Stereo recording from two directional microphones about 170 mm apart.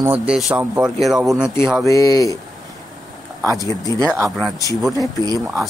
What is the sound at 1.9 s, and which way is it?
Speech, 20° left (ahead or behind).